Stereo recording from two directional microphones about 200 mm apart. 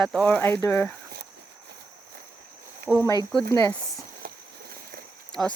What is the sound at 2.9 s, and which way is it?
Speech, centre (ahead or behind).